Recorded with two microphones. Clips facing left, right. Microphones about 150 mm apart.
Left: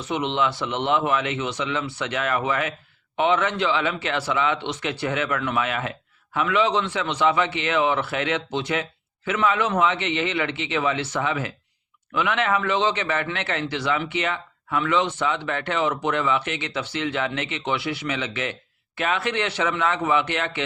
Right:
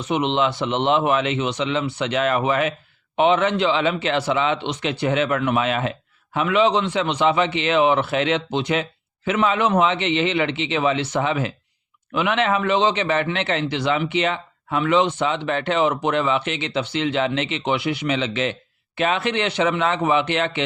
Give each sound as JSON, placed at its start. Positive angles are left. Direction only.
{"t": 0.1, "sound": "a man's voice", "side_deg": -20}